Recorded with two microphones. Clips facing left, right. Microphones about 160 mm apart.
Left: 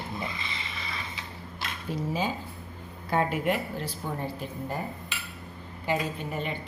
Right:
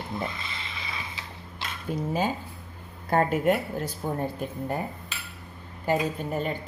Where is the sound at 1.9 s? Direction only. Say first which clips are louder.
Right 3 dB; 50° right (ahead or behind).